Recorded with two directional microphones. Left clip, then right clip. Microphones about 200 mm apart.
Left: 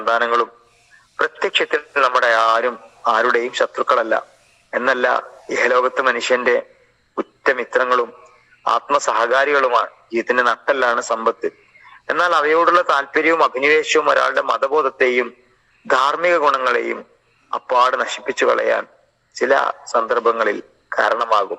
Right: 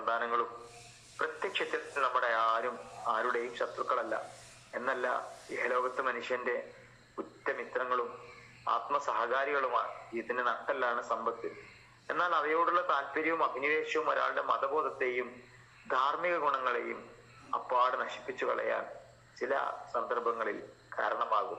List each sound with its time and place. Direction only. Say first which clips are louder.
0.0 s a man's voice: left 15 dB; 55° left (ahead or behind)